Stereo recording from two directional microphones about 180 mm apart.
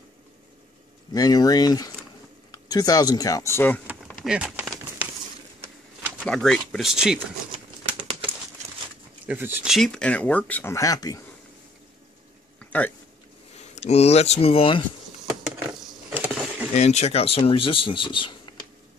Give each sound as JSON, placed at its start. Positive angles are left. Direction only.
{"t": 1.1, "sound": "speech", "side_deg": 20}
{"t": 3.8, "sound": "a sound", "side_deg": -5}
{"t": 6.1, "sound": "speech", "side_deg": 5}
{"t": 9.2, "sound": "speech", "side_deg": -10}
{"t": 9.7, "sound": "speech", "side_deg": 5}
{"t": 12.5, "sound": "a sound", "side_deg": 10}
{"t": 13.6, "sound": "speech", "side_deg": 35}
{"t": 16.1, "sound": "a sound", "side_deg": -5}
{"t": 16.7, "sound": "speech", "side_deg": 40}